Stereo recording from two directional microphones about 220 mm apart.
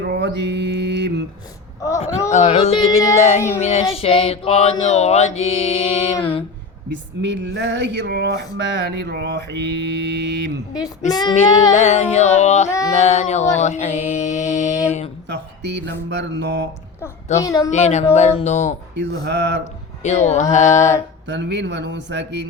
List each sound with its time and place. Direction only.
0.0 s mantra: 50° right (ahead or behind)
2.3 s mantra: 30° left (ahead or behind)
3.2 s speech: 30° left (ahead or behind)
3.9 s mantra: 25° left (ahead or behind)
7.2 s speech: 55° right (ahead or behind)
11.1 s mantra: 20° left (ahead or behind)
11.7 s speech: 30° left (ahead or behind)
12.9 s a sound: 30° left (ahead or behind)
15.3 s speech: 50° right (ahead or behind)
17.4 s speech: 15° left (ahead or behind)
17.7 s speech: 30° left (ahead or behind)
19.2 s speech: 50° right (ahead or behind)
20.0 s speech: 30° left (ahead or behind)
21.2 s speech: 55° right (ahead or behind)